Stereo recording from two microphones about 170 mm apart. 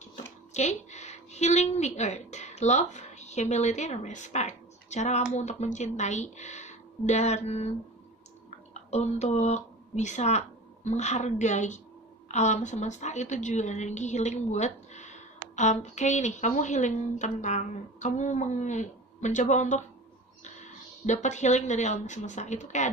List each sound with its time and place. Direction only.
0.1 s speech: 40° left (ahead or behind)
8.7 s speech: 40° left (ahead or behind)